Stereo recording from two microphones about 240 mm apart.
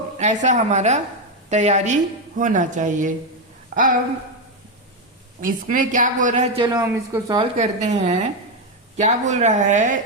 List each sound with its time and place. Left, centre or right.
0.2 s speech: right
5.4 s speech: right; by 7.3 s centre
7.3 s speech: right